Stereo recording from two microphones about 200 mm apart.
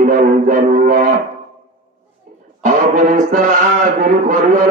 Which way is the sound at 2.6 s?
40° right (ahead or behind).